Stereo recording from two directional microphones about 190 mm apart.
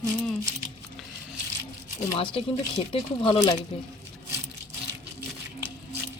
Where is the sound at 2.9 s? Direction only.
30° left (ahead or behind).